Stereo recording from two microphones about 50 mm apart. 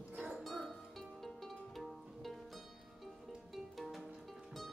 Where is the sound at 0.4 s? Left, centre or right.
Centre.